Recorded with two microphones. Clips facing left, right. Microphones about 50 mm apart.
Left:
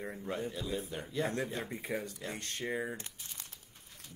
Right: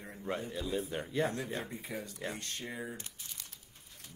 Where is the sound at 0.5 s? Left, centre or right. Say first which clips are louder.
Right 2 dB; right.